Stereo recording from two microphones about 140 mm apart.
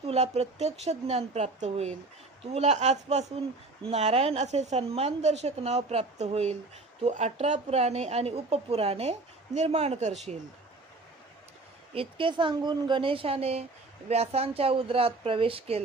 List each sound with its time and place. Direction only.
0.0 s a woman's voice: 50° right (ahead or behind)
11.9 s a woman's voice: 40° right (ahead or behind)